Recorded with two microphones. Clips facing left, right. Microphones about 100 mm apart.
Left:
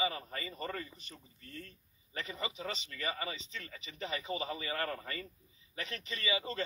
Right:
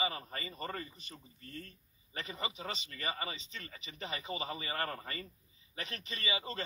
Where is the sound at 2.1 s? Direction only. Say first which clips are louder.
Left 1 dB; 25° right (ahead or behind).